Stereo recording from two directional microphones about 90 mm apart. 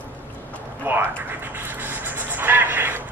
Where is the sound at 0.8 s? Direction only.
20° right (ahead or behind).